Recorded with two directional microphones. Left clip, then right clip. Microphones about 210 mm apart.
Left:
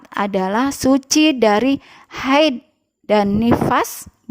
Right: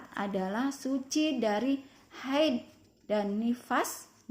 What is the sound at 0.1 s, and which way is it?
Speech, 45° left (ahead or behind).